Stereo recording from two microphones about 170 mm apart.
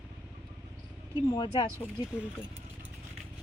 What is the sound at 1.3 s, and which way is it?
Speech, 25° left (ahead or behind).